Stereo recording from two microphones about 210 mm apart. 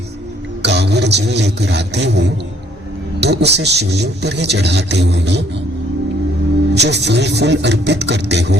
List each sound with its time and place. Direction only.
0.6 s a man's voice: 55° right (ahead or behind)
6.7 s speech: 55° right (ahead or behind)